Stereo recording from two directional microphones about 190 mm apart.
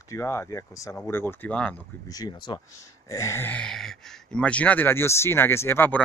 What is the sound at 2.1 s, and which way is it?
Speech, 20° left (ahead or behind).